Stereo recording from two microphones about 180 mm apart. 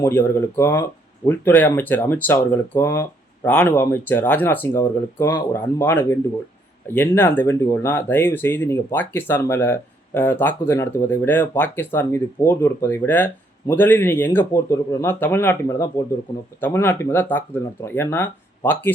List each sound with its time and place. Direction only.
0.0 s speech: 15° left (ahead or behind)